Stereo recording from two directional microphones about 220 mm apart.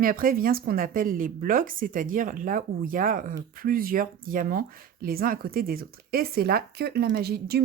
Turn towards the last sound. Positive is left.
turn(degrees=-45)  # may be behind; listen again after turning